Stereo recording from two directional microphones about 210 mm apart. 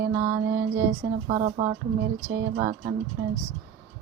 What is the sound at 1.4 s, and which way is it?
Speech, 40° right (ahead or behind).